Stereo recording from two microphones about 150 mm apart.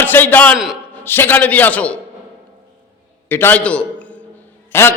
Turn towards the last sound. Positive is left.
turn(degrees=15)  # may be behind; listen again after turning